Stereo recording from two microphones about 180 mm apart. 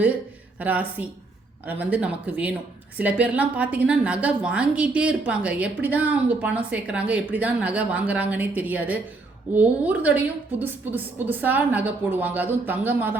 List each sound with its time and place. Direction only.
0.6 s a woman's voice: 10° right (ahead or behind)